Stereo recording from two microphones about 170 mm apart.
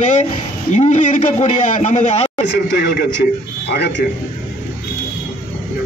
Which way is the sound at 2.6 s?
65° left (ahead or behind).